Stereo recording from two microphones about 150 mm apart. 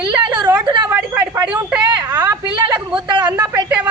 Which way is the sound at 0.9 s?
15° right (ahead or behind).